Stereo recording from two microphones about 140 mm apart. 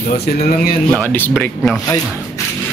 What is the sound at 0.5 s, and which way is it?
Speech, 90° left.